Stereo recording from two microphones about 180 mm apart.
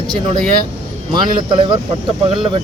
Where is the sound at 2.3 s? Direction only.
30° right (ahead or behind).